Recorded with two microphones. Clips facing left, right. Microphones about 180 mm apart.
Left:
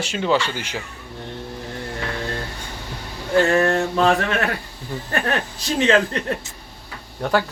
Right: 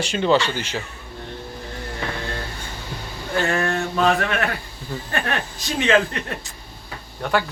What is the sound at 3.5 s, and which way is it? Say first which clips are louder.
Mantra: left 4 dB; 30° left (ahead or behind).